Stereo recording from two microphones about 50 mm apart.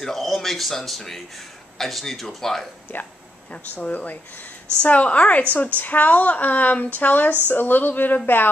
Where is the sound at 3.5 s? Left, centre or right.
Left.